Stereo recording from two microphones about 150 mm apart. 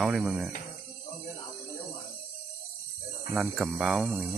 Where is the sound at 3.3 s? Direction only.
5° right (ahead or behind).